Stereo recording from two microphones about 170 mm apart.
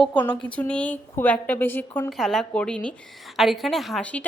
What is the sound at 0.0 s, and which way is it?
A woman's voice, 10° left (ahead or behind).